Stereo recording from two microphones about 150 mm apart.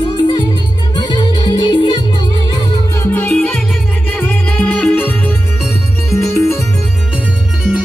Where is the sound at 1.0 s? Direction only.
30° left (ahead or behind).